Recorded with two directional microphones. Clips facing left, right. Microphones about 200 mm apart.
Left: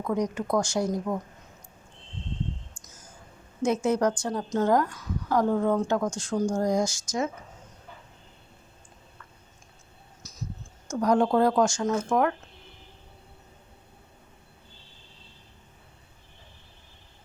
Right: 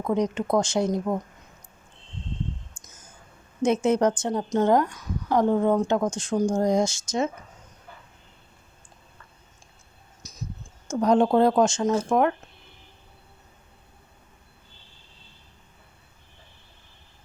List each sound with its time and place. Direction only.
0.0 s a woman's voice: 25° right (ahead or behind)
3.8 s a woman's voice: 20° right (ahead or behind)
10.2 s a sound: 15° right (ahead or behind)
10.8 s a woman's voice: 25° right (ahead or behind)